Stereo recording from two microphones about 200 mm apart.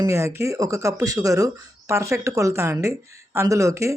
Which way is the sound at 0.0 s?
15° right (ahead or behind).